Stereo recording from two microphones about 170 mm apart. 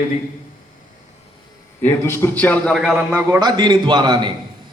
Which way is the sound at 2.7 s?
Centre (ahead or behind).